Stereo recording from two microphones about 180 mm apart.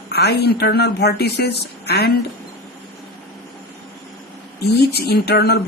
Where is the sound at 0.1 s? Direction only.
65° left (ahead or behind).